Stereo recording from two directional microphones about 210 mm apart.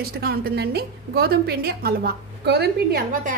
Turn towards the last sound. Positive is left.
turn(degrees=-50)  # may be behind; listen again after turning